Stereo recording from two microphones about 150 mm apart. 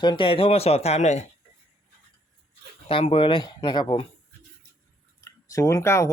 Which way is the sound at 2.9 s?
40° left (ahead or behind).